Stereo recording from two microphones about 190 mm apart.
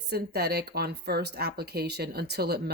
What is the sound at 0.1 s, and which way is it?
Speech, 55° right (ahead or behind).